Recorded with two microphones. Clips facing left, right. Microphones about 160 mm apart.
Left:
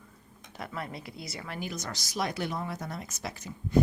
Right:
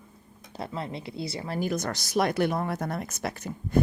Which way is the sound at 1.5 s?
50° right (ahead or behind).